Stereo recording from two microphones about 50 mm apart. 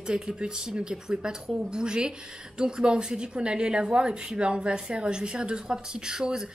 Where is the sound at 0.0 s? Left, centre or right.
Centre.